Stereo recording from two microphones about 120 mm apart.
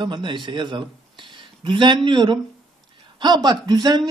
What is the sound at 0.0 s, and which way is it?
A man's voice, 40° right (ahead or behind).